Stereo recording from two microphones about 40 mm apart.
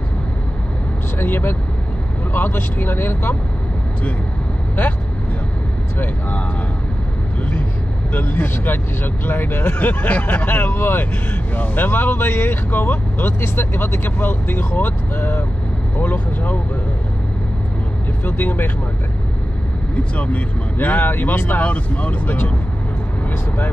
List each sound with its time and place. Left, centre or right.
1.2 s speech: left
8.1 s speech: left
11.5 s speech: left
13.4 s speech: left
18.2 s speech: left
20.2 s speech: left